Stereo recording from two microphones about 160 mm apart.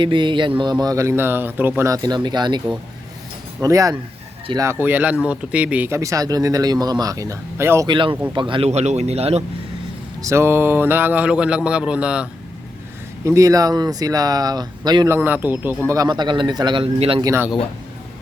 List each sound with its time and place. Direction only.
0.0 s speech: 30° right (ahead or behind)
7.9 s speech: 30° right (ahead or behind)
10.2 s speech: 20° right (ahead or behind)
13.2 s speech: 20° right (ahead or behind)
15.9 s speech: 25° right (ahead or behind)
17.2 s speech: 20° right (ahead or behind)